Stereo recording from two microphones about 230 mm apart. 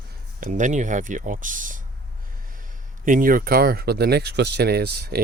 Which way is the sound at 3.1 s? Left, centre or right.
Right.